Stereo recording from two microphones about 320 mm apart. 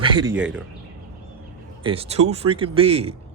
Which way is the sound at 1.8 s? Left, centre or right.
Centre.